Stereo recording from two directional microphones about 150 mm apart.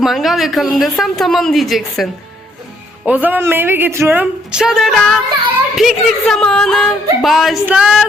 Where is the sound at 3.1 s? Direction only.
10° right (ahead or behind).